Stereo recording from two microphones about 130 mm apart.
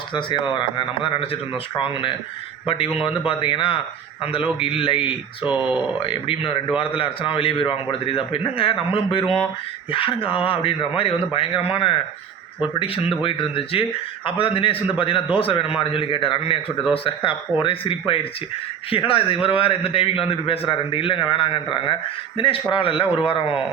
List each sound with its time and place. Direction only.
0.1 s a man's voice: 40° left (ahead or behind)
13.2 s a man's voice: 45° left (ahead or behind)